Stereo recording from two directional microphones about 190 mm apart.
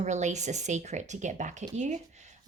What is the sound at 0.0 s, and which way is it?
Speech, 40° right (ahead or behind).